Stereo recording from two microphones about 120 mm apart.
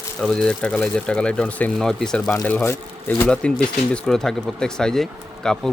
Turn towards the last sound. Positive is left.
turn(degrees=5)  # may be behind; listen again after turning